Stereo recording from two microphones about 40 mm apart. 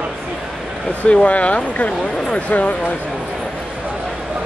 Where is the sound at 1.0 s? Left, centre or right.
Left.